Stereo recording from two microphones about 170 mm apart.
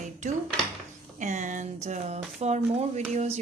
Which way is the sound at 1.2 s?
45° right (ahead or behind).